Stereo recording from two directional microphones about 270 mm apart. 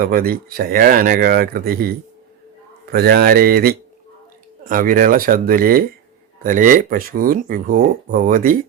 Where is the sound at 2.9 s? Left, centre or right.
Right.